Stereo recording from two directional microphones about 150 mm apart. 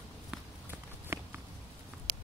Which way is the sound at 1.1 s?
15° right (ahead or behind).